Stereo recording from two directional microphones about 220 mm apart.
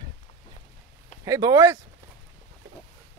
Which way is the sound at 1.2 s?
15° right (ahead or behind).